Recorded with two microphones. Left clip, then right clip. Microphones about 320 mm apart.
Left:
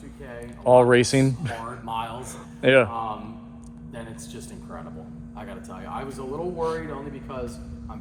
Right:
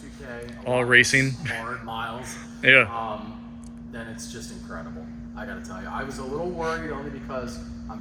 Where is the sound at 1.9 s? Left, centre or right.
Centre.